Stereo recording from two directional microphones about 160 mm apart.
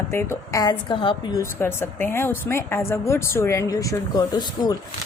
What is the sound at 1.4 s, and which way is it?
A woman's voice, 15° left (ahead or behind).